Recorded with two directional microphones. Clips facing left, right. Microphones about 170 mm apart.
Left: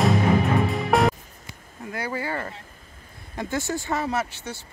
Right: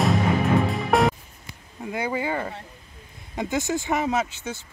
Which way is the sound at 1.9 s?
20° right (ahead or behind).